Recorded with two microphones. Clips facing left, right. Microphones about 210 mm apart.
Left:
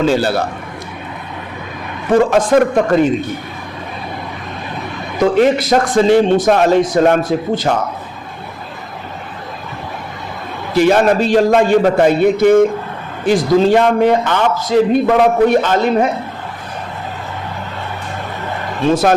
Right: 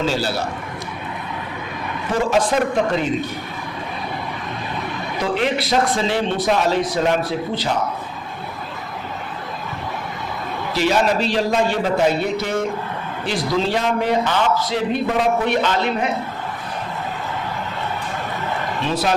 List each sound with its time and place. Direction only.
0.0 s a man's voice: 55° left (ahead or behind)
2.1 s a man's voice: 55° left (ahead or behind)
5.2 s a man's voice: 45° left (ahead or behind)
10.8 s a man's voice: 55° left (ahead or behind)
15.4 s a man's voice: 45° left (ahead or behind)
18.9 s a man's voice: 50° left (ahead or behind)